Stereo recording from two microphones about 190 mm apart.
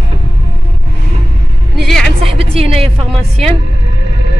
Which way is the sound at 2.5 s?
30° right (ahead or behind).